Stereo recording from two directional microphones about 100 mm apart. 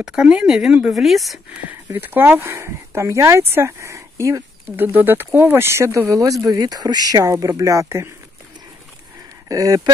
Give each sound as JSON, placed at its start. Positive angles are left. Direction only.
{"t": 0.0, "sound": "a woman's voice", "side_deg": -10}
{"t": 1.7, "sound": "speech", "side_deg": -20}
{"t": 4.7, "sound": "speech", "side_deg": -20}
{"t": 9.5, "sound": "speech", "side_deg": -35}